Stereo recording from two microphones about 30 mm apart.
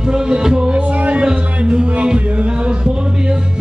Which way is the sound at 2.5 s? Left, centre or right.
Right.